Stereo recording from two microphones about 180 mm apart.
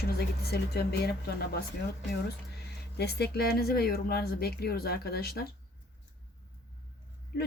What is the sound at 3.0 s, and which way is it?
Speech, 65° left (ahead or behind).